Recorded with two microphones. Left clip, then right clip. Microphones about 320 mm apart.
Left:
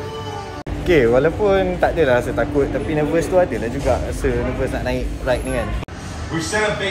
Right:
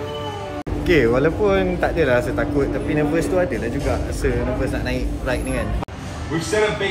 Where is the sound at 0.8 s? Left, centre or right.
Centre.